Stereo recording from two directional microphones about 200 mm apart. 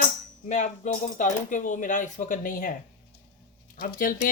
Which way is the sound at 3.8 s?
45° left (ahead or behind).